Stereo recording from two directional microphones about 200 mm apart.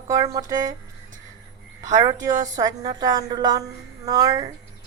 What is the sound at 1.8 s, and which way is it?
A woman's voice, 20° right (ahead or behind).